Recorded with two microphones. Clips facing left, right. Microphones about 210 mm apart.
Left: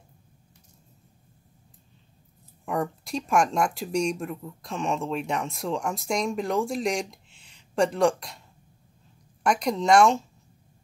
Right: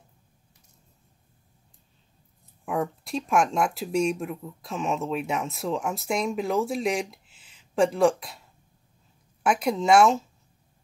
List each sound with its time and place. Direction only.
2.6 s speech: centre (ahead or behind)